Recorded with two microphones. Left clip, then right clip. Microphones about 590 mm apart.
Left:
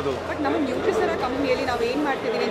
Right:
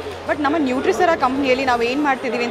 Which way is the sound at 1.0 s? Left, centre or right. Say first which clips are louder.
Right 7 dB; right.